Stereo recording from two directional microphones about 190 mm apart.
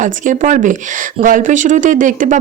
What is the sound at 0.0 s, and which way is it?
Speech, 40° right (ahead or behind).